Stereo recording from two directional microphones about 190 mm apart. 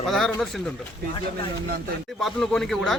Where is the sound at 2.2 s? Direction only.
Centre (ahead or behind).